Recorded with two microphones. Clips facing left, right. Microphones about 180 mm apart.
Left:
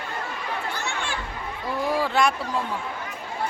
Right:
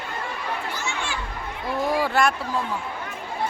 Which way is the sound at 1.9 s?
10° right (ahead or behind).